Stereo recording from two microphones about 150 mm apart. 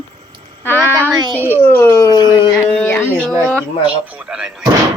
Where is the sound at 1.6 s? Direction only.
15° left (ahead or behind).